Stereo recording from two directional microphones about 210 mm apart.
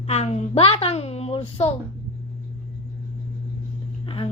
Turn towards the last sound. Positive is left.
turn(degrees=25)  # may be behind; listen again after turning